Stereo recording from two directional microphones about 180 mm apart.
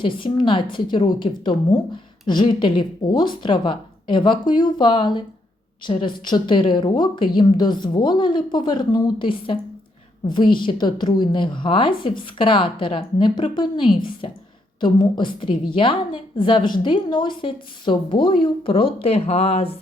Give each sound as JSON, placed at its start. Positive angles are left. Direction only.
{"t": 0.0, "sound": "a woman's voice", "side_deg": 25}